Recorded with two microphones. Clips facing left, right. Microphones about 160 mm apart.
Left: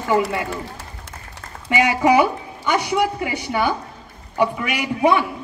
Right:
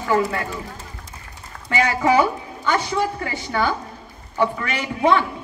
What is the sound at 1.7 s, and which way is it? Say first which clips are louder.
A woman's voice: left 2 dB; 15° left (ahead or behind).